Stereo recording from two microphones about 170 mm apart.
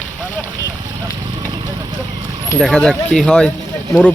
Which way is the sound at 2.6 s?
5° left (ahead or behind).